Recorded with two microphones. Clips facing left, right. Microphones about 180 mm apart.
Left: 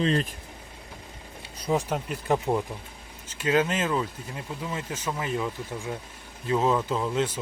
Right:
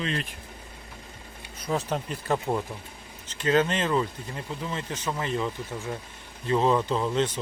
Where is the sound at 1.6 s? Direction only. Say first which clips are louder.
Left 2 dB; 10° left (ahead or behind).